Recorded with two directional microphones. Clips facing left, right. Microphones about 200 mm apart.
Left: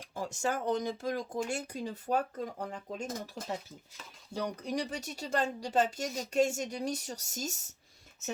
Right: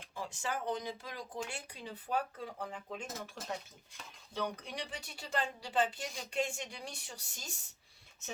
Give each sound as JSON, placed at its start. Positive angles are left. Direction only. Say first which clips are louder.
{"t": 0.1, "sound": "speech", "louder": "left 6 dB", "side_deg": 45}
{"t": 4.4, "sound": "speech", "louder": "left 5 dB", "side_deg": 40}